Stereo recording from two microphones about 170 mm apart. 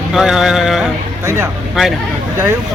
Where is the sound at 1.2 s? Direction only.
15° right (ahead or behind).